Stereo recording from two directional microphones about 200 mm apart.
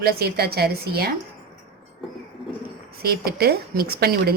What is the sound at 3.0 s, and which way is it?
A woman's voice, 50° right (ahead or behind).